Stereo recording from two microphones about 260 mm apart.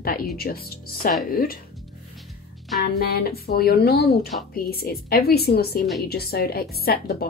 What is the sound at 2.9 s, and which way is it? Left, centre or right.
Speech, left.